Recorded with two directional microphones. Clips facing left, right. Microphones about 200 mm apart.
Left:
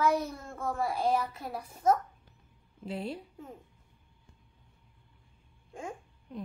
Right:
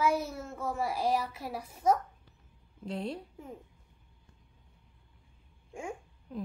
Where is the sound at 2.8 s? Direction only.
5° left (ahead or behind).